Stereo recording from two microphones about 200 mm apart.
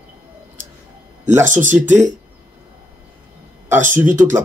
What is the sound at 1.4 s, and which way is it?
Speech, 40° right (ahead or behind).